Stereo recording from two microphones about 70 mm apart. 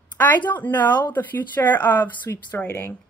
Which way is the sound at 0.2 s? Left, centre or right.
Left.